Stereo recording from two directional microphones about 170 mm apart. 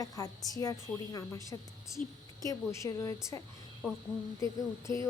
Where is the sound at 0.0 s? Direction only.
20° left (ahead or behind).